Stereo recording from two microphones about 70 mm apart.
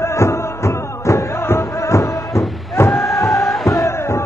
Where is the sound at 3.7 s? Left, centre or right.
Left.